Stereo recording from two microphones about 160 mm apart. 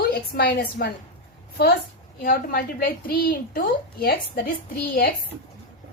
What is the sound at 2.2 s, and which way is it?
A woman's voice, 65° left (ahead or behind).